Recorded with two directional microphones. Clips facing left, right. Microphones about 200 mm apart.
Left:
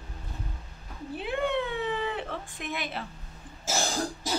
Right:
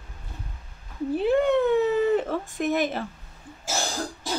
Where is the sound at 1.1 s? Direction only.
40° right (ahead or behind).